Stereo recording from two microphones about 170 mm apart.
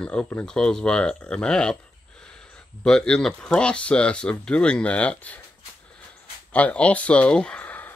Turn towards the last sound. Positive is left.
turn(degrees=10)  # may be behind; listen again after turning